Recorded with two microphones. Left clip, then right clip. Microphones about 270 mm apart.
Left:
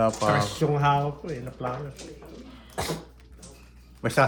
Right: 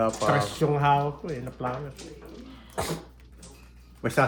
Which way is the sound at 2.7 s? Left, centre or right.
Right.